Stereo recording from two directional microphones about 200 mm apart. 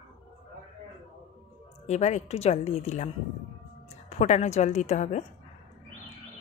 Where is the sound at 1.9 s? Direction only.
35° left (ahead or behind).